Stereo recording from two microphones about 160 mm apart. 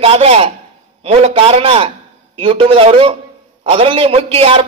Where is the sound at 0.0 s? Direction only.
40° right (ahead or behind).